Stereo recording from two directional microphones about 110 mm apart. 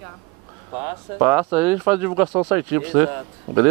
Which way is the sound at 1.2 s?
15° right (ahead or behind).